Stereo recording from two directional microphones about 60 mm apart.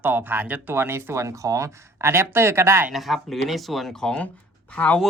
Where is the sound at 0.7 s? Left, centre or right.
Right.